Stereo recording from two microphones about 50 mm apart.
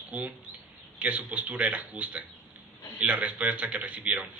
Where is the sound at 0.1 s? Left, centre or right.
Right.